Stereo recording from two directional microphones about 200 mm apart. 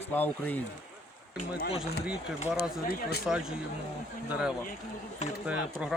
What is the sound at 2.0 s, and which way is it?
Speech, 5° right (ahead or behind).